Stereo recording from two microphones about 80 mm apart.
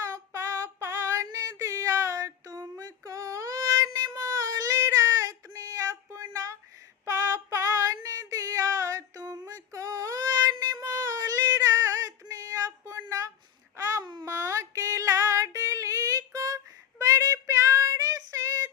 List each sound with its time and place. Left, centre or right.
0.0 s female singing: right
13.7 s babbling: right
14.0 s a sound: right
14.3 s female singing: right
17.0 s child singing: right